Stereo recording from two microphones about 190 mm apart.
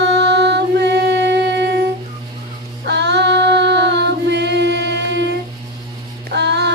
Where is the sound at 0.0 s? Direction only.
65° right (ahead or behind).